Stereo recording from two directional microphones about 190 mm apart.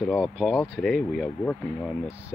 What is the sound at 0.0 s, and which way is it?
Speech, centre (ahead or behind).